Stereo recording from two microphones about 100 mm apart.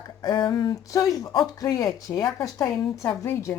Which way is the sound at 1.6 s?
35° left (ahead or behind).